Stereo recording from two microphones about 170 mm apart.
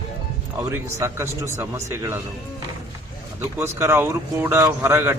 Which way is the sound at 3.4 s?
15° right (ahead or behind).